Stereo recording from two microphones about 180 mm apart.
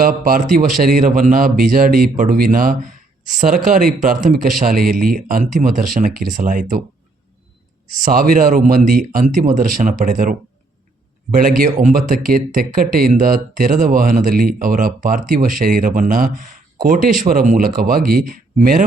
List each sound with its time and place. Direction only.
0.0 s speech: 50° right (ahead or behind)
7.9 s speech: 50° right (ahead or behind)
11.3 s speech: 50° right (ahead or behind)